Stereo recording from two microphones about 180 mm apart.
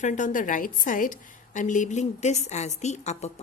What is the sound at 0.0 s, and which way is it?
A woman's voice, 45° left (ahead or behind).